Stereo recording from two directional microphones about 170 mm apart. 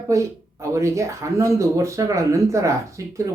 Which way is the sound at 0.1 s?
20° right (ahead or behind).